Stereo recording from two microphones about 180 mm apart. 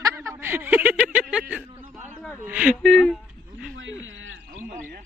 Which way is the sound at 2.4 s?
10° right (ahead or behind).